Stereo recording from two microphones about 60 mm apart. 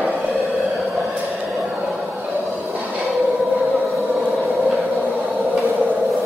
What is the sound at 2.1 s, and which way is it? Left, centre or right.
Music, right.